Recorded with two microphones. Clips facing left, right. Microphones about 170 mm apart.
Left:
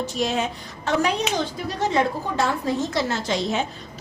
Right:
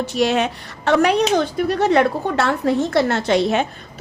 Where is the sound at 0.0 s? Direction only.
70° right (ahead or behind).